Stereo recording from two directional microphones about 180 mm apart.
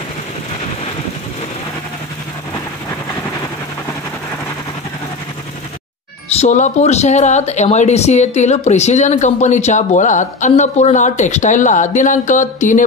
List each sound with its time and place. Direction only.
6.4 s speech: 40° left (ahead or behind)